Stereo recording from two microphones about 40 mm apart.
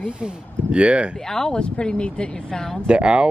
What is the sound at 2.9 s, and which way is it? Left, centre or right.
Speech, right.